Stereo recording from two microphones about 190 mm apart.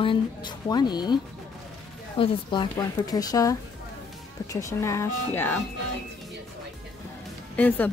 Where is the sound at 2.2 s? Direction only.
25° left (ahead or behind).